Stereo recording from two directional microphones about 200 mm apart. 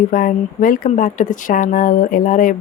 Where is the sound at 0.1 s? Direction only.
45° left (ahead or behind).